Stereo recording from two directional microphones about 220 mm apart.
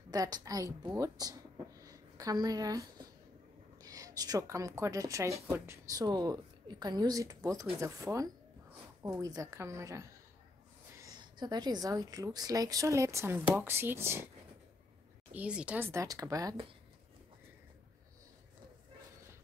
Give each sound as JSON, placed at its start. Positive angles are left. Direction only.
{"t": 0.1, "sound": "a woman's voice", "side_deg": -15}
{"t": 15.3, "sound": "a woman's voice", "side_deg": -5}